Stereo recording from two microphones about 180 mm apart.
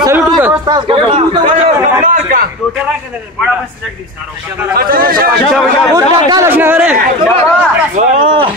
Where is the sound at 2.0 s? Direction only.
50° right (ahead or behind).